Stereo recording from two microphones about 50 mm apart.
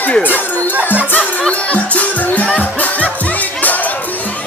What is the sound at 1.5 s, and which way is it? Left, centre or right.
Music, left.